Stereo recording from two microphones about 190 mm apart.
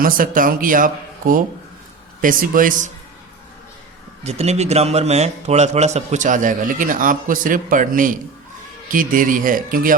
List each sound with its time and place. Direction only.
0.0 s speech: 45° right (ahead or behind)
4.2 s a man's voice: 35° right (ahead or behind)